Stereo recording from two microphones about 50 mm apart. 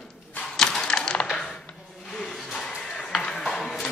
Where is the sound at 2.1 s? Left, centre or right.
Centre.